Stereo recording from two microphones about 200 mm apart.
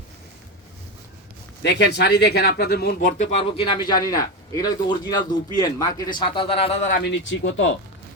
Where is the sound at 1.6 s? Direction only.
60° left (ahead or behind).